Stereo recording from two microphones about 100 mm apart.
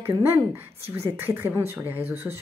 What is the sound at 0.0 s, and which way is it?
A woman's voice, 25° right (ahead or behind).